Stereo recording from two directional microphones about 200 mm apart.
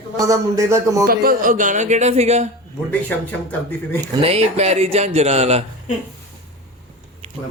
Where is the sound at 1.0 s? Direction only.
45° right (ahead or behind).